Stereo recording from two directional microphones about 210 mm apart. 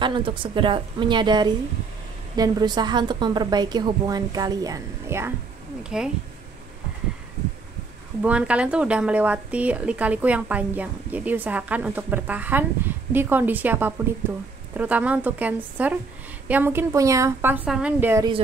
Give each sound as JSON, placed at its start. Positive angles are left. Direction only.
{"t": 0.0, "sound": "a woman's voice", "side_deg": -25}
{"t": 8.2, "sound": "speech", "side_deg": -5}